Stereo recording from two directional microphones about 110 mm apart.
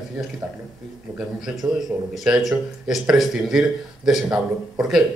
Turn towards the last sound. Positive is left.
turn(degrees=-5)  # may be behind; listen again after turning